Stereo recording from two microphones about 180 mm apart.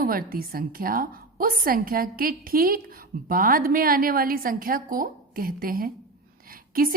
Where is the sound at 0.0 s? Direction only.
50° right (ahead or behind).